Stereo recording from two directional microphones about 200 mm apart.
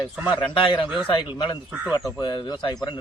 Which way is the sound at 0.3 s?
25° left (ahead or behind).